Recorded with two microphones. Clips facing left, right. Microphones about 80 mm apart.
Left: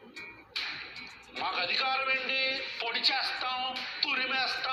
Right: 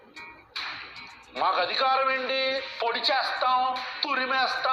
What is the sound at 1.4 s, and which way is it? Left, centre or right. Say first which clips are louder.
A man's voice: right 9 dB; right.